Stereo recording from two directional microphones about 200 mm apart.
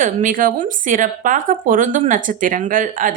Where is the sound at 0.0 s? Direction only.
40° right (ahead or behind).